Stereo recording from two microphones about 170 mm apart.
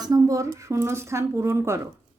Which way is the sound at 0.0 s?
20° right (ahead or behind).